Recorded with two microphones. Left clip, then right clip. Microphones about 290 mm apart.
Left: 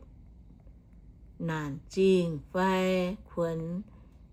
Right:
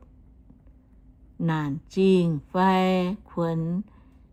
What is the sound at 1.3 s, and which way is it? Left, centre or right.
Speech, centre.